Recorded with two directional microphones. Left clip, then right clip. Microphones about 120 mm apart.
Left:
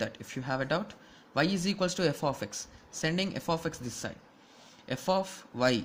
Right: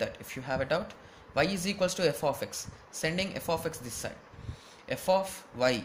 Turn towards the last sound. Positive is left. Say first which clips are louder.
# even
turn(degrees=55)  # may be behind; listen again after turning